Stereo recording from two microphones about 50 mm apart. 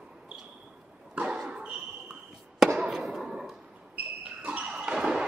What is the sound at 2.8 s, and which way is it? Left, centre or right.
Fireworks, centre.